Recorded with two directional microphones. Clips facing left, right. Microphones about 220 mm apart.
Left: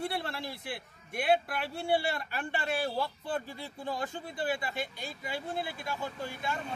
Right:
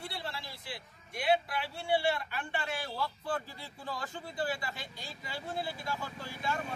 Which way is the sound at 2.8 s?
25° left (ahead or behind).